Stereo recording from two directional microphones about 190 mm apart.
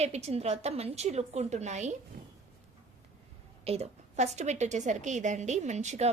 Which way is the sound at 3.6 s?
35° right (ahead or behind).